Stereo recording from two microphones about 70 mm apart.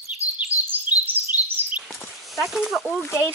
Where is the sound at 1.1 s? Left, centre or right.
Right.